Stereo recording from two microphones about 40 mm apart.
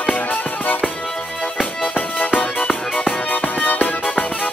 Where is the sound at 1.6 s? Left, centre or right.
Left.